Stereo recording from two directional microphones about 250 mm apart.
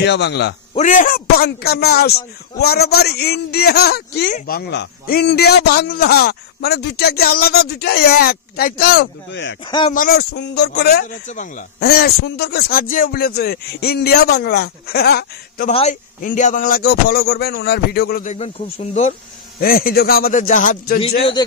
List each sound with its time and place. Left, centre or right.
0.0 s a man's voice: left
0.7 s a man's voice: left
9.7 s speech: centre
9.9 s a man's voice: left
21.4 s speech: centre